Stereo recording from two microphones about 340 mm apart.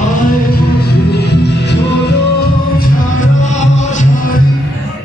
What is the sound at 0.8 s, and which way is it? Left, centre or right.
Music, left.